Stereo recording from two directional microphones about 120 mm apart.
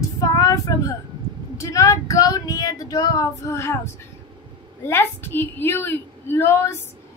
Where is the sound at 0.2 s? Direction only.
25° left (ahead or behind).